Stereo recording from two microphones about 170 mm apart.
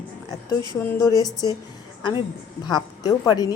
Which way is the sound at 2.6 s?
25° left (ahead or behind).